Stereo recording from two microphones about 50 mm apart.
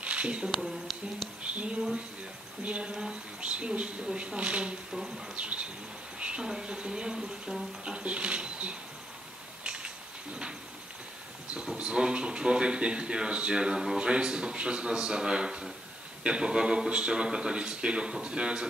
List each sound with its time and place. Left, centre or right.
0.0 s a sound: right
0.5 s speech: centre
1.4 s speech: right
4.9 s speech: centre
5.3 s speech: right
9.6 s a sound: right
11.5 s speech: right